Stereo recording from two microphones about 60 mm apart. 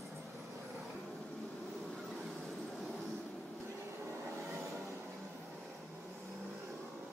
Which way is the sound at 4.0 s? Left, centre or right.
Right.